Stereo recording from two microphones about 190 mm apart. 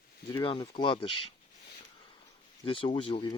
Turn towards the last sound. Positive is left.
turn(degrees=25)  # may be behind; listen again after turning